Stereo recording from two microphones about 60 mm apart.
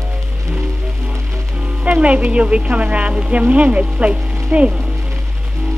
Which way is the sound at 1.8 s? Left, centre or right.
Right.